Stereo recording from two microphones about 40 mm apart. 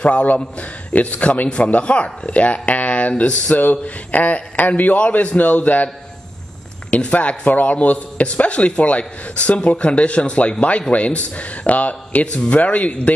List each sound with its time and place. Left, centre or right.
0.0 s a man's voice: left
6.9 s a man's voice: left